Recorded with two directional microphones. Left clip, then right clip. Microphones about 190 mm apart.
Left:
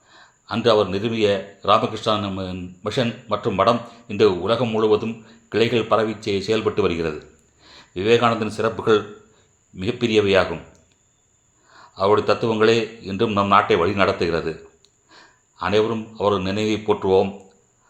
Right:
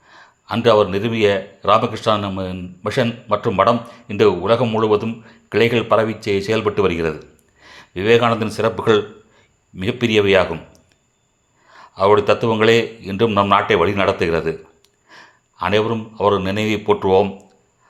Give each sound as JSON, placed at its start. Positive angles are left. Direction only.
{"t": 0.1, "sound": "speech", "side_deg": -15}
{"t": 11.7, "sound": "speech", "side_deg": -15}